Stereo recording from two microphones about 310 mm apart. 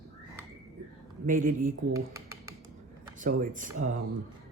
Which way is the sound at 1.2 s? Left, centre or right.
Right.